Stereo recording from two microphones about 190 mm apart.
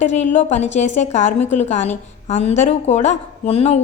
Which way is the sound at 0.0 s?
40° left (ahead or behind).